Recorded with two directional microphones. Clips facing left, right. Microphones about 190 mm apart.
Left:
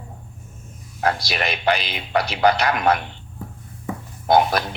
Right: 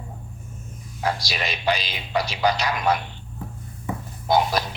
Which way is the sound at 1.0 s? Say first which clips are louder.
Left 4 dB; 60° left (ahead or behind).